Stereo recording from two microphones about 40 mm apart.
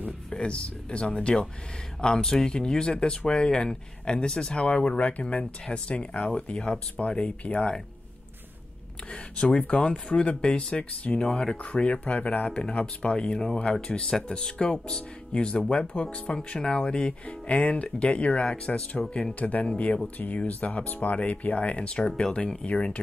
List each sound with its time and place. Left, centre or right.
0.3 s speech: left
4.9 s speech: left
9.1 s speech: left
11.2 s speech: centre
11.6 s speech: left
12.4 s speech: centre
16.3 s speech: left